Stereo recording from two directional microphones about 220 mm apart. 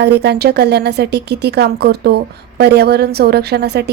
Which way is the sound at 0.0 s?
50° right (ahead or behind).